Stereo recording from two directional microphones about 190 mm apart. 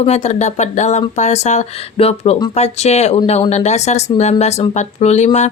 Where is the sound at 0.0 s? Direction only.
35° left (ahead or behind).